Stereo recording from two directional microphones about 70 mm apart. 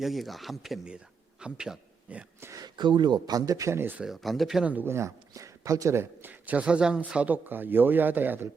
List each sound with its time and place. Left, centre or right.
0.0 s a man's voice: centre
2.5 s speech: right
3.7 s speech: right
4.0 s speech: centre
4.6 s a man's voice: right
4.9 s speech: right
6.0 s a man's voice: right